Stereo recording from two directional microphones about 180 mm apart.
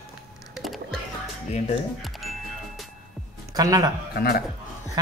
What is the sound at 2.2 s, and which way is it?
Music, centre (ahead or behind).